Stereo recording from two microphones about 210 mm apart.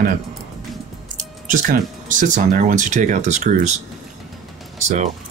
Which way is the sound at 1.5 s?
40° right (ahead or behind).